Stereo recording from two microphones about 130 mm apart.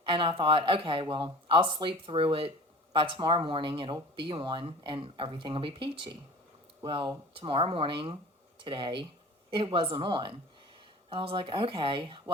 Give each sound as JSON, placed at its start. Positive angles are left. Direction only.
{"t": 0.0, "sound": "speech", "side_deg": -40}